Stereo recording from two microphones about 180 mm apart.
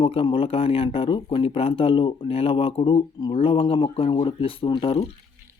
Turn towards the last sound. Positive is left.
turn(degrees=30)  # may be behind; listen again after turning